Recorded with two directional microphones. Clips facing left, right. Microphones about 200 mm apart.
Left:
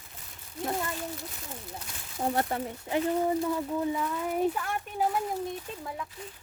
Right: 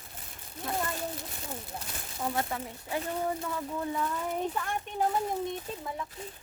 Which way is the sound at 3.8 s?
10° left (ahead or behind).